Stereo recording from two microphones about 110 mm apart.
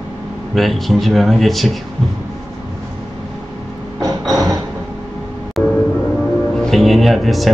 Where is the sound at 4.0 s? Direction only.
35° right (ahead or behind).